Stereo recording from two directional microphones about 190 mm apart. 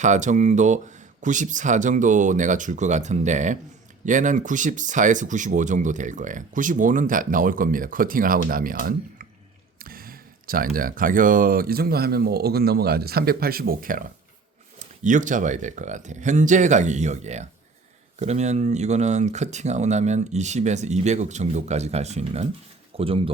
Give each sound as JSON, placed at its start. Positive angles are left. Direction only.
{"t": 0.0, "sound": "speech", "side_deg": -40}
{"t": 9.7, "sound": "a sound", "side_deg": -50}
{"t": 10.8, "sound": "speech", "side_deg": -50}